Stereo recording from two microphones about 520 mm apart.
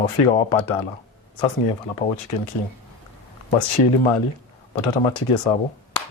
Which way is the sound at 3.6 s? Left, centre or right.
Left.